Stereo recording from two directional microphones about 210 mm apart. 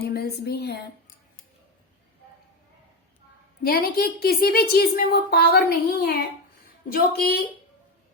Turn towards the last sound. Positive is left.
turn(degrees=45)  # may be behind; listen again after turning